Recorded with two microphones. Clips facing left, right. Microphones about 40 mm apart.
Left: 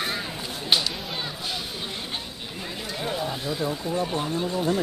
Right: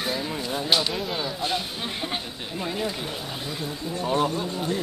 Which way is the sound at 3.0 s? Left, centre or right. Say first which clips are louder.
Left 4 dB; centre.